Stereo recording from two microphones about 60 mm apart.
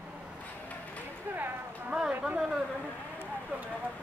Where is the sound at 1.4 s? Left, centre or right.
Right.